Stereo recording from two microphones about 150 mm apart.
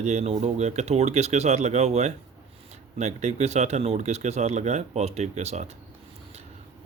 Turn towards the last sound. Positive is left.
turn(degrees=-45)  # may be behind; listen again after turning